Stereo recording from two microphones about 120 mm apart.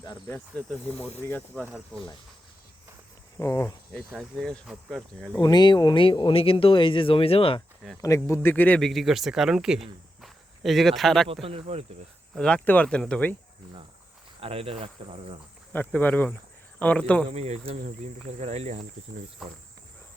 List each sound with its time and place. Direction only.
0.3 s speech: 10° left (ahead or behind)
3.3 s speech: 20° left (ahead or behind)
4.2 s speech: 5° left (ahead or behind)
5.4 s speech: 35° left (ahead or behind)
8.0 s speech: 25° left (ahead or behind)
8.8 s speech: centre (ahead or behind)
10.2 s a sound: centre (ahead or behind)
11.4 s speech: 55° right (ahead or behind)
12.4 s speech: 10° left (ahead or behind)
14.4 s cricket: 55° right (ahead or behind)
15.7 s speech: 15° left (ahead or behind)
17.2 s speech: 60° right (ahead or behind)